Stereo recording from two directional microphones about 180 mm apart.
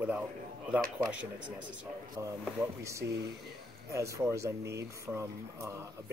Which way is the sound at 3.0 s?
65° right (ahead or behind).